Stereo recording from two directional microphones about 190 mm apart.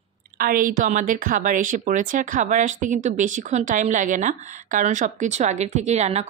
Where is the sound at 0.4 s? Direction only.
50° right (ahead or behind).